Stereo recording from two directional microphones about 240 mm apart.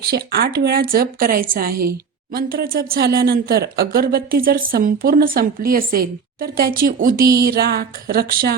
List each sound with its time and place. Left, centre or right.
0.0 s speech: right